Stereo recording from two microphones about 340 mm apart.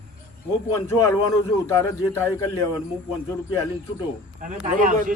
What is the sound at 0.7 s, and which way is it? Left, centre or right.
A man's voice, centre.